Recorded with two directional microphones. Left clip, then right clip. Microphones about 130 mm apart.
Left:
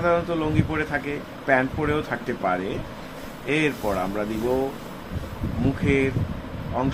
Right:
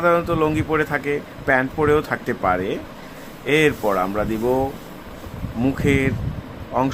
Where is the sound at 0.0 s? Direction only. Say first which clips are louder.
Right 5 dB; 70° right (ahead or behind).